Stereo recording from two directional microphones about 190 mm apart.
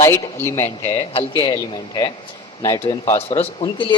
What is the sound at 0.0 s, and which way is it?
A man's voice, 15° left (ahead or behind).